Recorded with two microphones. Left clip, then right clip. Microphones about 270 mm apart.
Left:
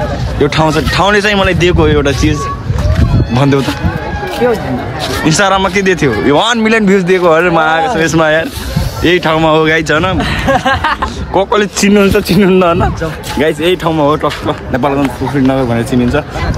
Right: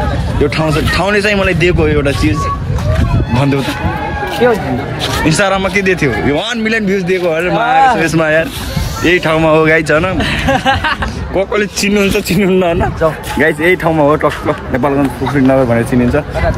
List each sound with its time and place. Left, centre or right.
0.4 s speech: centre
3.3 s speech: centre
5.2 s speech: centre
10.1 s speech: left
11.3 s speech: centre
11.8 s a man's voice: left
13.4 s speech: centre